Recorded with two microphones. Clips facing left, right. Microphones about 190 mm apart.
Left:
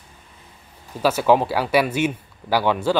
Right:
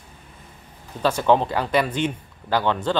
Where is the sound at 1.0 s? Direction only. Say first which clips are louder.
Left 2 dB; 5° left (ahead or behind).